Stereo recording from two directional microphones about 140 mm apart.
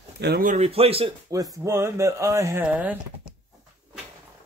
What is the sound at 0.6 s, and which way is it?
Speech, 45° right (ahead or behind).